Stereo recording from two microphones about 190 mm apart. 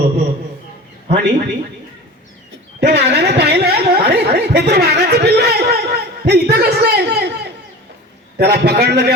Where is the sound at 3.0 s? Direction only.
60° right (ahead or behind).